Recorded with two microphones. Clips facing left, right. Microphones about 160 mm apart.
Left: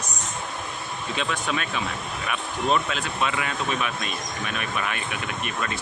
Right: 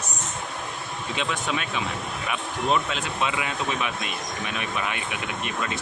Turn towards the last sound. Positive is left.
turn(degrees=-20)  # may be behind; listen again after turning